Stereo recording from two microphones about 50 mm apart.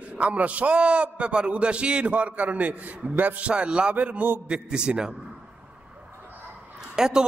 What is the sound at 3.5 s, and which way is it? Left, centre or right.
Speech, right.